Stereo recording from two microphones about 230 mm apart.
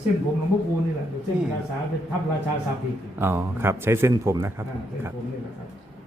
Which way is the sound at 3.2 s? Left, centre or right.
Centre.